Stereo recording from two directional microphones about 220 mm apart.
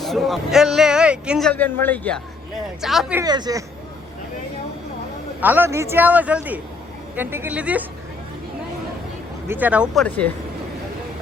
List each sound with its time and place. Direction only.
0.0 s speech: centre (ahead or behind)
3.2 s a man's voice: 20° right (ahead or behind)
5.4 s a man's voice: 10° right (ahead or behind)
9.5 s a man's voice: 5° right (ahead or behind)
9.9 s speech: 5° left (ahead or behind)